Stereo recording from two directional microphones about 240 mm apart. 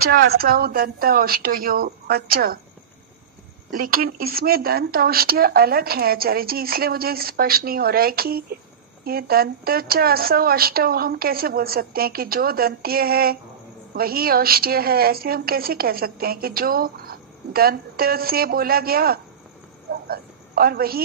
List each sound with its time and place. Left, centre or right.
0.0 s a woman's voice: right
3.7 s a woman's voice: right
19.9 s a sound: right